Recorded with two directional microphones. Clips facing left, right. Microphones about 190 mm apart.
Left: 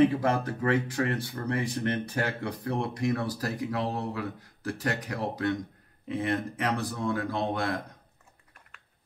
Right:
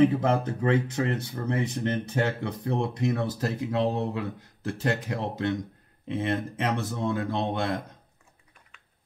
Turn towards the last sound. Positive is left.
turn(degrees=-25)  # may be behind; listen again after turning